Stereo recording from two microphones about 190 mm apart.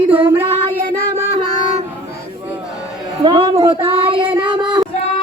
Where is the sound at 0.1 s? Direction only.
10° right (ahead or behind).